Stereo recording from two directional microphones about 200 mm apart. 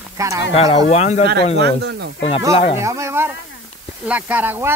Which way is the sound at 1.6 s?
55° right (ahead or behind).